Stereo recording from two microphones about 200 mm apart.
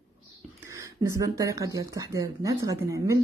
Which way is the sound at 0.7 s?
15° right (ahead or behind).